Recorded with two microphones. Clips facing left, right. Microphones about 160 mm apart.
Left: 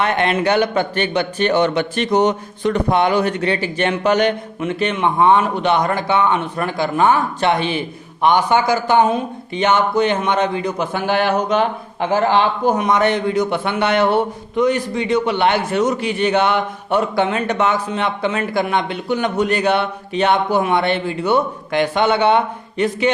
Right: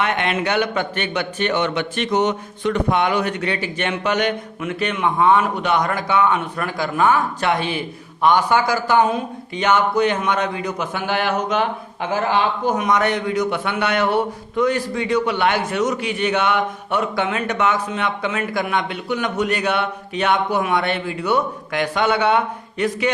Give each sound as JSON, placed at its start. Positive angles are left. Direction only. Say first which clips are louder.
{"t": 0.0, "sound": "speech", "louder": "left 4 dB", "side_deg": 35}